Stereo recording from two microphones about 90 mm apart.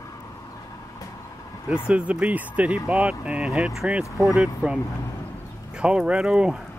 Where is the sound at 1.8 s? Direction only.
10° right (ahead or behind).